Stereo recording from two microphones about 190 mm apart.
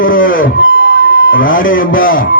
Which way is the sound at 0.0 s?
45° left (ahead or behind).